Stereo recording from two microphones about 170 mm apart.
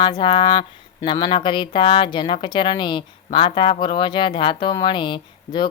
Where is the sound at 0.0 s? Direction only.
30° left (ahead or behind).